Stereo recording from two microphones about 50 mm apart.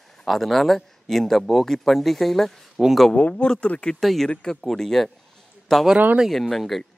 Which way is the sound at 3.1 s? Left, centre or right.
Left.